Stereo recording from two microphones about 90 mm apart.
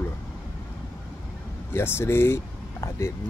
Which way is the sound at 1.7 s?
25° left (ahead or behind).